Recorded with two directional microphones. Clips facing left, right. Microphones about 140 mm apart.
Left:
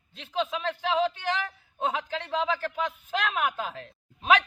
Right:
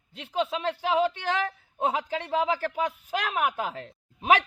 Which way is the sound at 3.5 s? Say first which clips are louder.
Right 2 dB; 15° right (ahead or behind).